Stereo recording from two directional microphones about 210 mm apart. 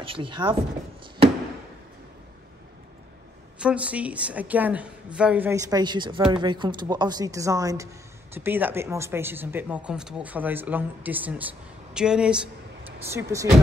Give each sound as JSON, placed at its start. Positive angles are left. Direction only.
{"t": 0.0, "sound": "speech", "side_deg": -25}
{"t": 3.5, "sound": "speech", "side_deg": -5}